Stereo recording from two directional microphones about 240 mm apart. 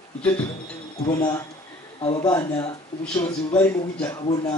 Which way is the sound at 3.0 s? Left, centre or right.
Centre.